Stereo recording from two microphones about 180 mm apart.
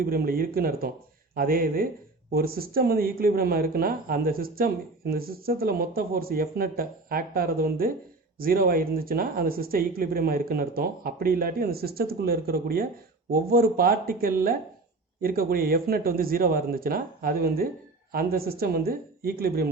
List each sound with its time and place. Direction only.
0.0 s speech: 55° right (ahead or behind)